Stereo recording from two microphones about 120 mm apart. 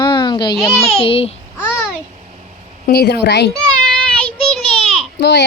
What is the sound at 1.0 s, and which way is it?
Speech, 50° left (ahead or behind).